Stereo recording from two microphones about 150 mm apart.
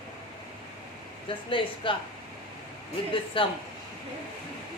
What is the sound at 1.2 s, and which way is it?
Speech, 35° left (ahead or behind).